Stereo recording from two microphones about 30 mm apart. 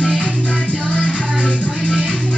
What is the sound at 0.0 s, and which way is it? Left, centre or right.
Music, left.